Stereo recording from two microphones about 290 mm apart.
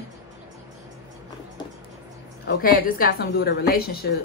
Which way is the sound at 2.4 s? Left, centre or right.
Left.